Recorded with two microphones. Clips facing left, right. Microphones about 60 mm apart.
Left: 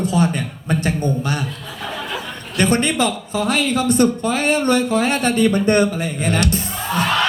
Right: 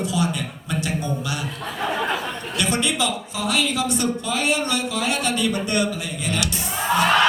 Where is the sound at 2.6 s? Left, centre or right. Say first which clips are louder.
Left 6 dB; left.